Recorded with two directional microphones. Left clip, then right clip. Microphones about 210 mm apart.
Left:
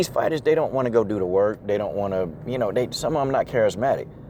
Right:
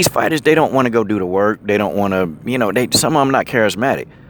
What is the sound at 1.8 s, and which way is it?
Speech, 40° right (ahead or behind).